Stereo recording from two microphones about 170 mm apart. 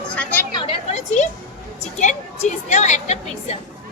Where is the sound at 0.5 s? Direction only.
35° left (ahead or behind).